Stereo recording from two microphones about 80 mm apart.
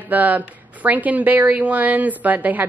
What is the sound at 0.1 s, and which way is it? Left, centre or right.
A woman's voice, right.